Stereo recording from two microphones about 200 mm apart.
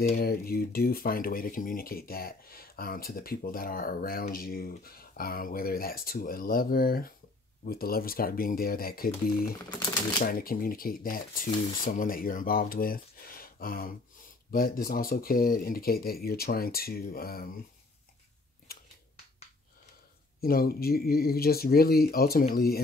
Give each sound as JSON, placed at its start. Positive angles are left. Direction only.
{"t": 0.1, "sound": "speech", "side_deg": 50}
{"t": 10.2, "sound": "speech", "side_deg": 45}
{"t": 18.7, "sound": "a sound", "side_deg": 50}
{"t": 20.3, "sound": "speech", "side_deg": 50}